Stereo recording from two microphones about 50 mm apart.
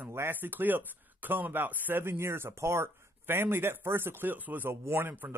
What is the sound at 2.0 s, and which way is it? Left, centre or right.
Speech, right.